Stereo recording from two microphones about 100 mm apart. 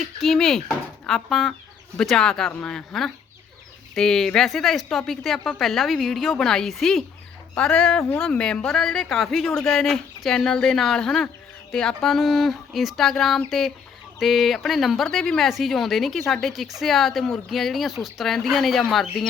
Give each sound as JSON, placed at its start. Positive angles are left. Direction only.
{"t": 0.0, "sound": "speech", "side_deg": 0}